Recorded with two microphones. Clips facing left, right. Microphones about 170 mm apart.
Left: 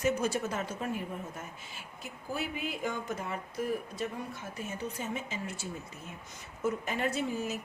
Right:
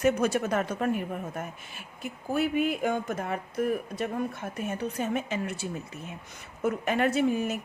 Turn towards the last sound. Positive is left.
turn(degrees=-60)  # may be behind; listen again after turning